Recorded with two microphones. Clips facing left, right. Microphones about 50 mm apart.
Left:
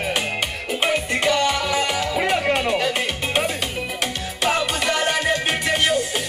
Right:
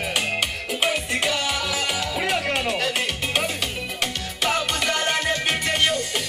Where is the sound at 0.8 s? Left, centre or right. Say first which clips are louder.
Left 3 dB; centre.